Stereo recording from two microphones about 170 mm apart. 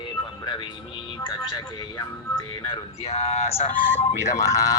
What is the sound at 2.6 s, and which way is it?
Speech, 35° left (ahead or behind).